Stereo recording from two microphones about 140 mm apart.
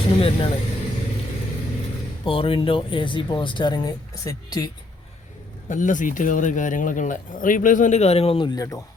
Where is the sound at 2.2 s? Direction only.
40° left (ahead or behind).